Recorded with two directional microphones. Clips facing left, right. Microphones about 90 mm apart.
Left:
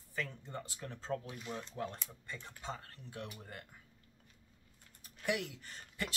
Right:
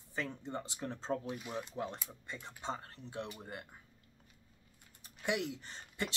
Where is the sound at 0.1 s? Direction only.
20° right (ahead or behind).